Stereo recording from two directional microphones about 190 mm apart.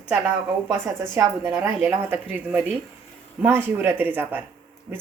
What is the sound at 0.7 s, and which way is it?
Speech, 15° right (ahead or behind).